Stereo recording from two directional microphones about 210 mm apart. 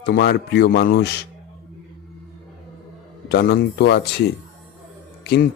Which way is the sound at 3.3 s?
50° left (ahead or behind).